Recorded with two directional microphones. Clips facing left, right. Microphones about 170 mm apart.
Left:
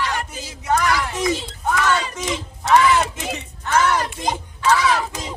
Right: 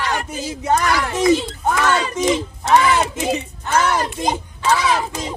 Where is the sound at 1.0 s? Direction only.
60° right (ahead or behind).